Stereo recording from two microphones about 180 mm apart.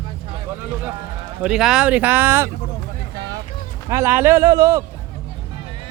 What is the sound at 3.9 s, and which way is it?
Speech, 15° right (ahead or behind).